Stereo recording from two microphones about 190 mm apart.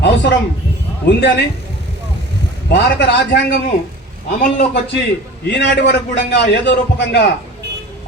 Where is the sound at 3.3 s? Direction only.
55° left (ahead or behind).